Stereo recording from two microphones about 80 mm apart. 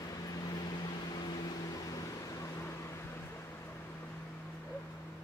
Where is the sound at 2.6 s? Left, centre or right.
Left.